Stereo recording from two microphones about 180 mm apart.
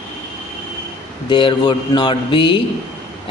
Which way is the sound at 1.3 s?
25° left (ahead or behind).